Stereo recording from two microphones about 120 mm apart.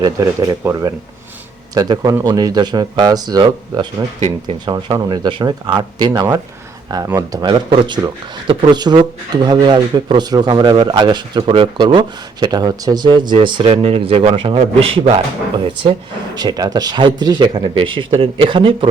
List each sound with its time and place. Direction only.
0.0 s speech: 30° right (ahead or behind)
4.6 s speech: 35° right (ahead or behind)
7.4 s a man's voice: 40° right (ahead or behind)